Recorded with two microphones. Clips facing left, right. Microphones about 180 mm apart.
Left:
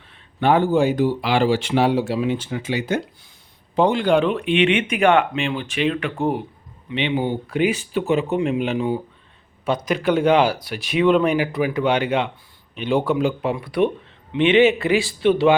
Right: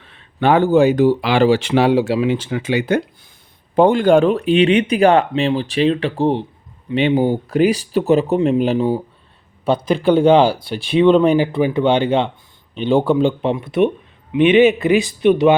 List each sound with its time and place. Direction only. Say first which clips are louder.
0.0 s speech: right 3 dB; 85° right; by 3.0 s 65° right (ahead or behind)
3.8 s speech: right 5 dB; 50° right (ahead or behind); by 6.4 s 30° right (ahead or behind)
6.9 s speech: right 7 dB; 40° right (ahead or behind); by 15.5 s 20° right (ahead or behind)